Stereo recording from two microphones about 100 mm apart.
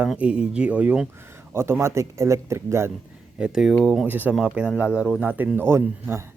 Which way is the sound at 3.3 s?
10° right (ahead or behind).